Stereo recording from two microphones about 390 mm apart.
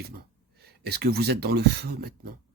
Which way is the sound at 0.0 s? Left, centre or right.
Right.